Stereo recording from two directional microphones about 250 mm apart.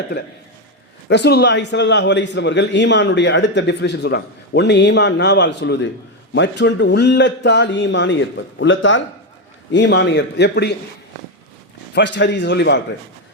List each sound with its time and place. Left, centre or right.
0.1 s a man's voice: left
11.9 s a man's voice: left